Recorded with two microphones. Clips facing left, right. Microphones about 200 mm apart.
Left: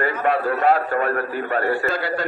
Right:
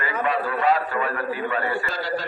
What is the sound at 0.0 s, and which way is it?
A man's voice, 55° left (ahead or behind).